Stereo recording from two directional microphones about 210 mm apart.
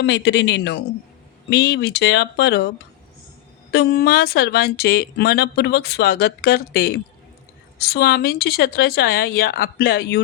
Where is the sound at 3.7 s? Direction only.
50° left (ahead or behind).